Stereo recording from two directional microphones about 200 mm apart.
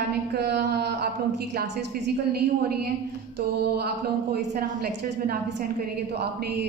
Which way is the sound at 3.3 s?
55° right (ahead or behind).